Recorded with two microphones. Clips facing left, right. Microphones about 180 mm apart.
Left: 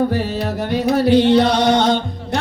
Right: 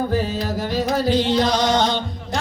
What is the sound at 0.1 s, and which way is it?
Music, 65° left (ahead or behind).